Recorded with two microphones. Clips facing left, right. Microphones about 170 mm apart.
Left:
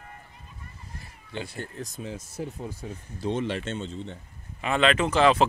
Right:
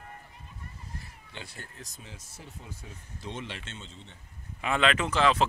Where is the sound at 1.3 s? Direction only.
55° left (ahead or behind).